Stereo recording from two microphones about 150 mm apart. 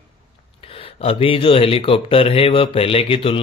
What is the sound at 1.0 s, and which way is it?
Speech, 35° left (ahead or behind).